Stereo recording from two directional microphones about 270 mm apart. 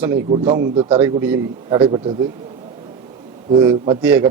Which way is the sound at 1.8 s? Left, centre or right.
Centre.